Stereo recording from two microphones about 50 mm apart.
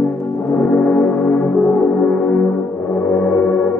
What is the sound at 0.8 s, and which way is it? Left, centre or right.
Music, left.